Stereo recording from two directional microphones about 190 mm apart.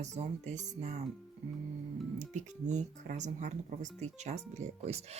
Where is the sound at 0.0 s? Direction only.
40° right (ahead or behind).